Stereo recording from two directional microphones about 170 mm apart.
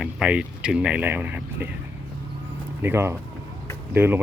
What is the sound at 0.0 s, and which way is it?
Speech, 5° right (ahead or behind).